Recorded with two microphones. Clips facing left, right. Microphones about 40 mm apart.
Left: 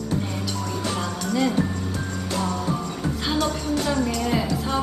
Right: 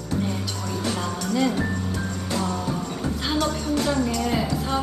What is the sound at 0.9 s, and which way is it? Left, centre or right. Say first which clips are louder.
Speech: left 1 dB; left.